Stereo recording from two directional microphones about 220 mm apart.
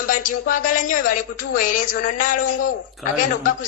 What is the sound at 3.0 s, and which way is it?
Speech, centre (ahead or behind).